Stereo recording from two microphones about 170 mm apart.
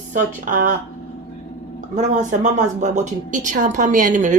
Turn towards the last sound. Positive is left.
turn(degrees=-50)  # may be behind; listen again after turning